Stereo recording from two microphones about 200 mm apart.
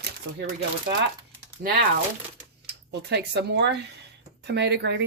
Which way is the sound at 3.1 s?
60° right (ahead or behind).